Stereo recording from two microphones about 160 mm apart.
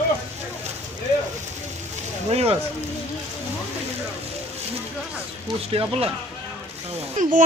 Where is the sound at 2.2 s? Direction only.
40° right (ahead or behind).